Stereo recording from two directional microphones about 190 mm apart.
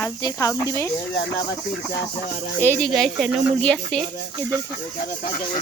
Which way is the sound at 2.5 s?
10° left (ahead or behind).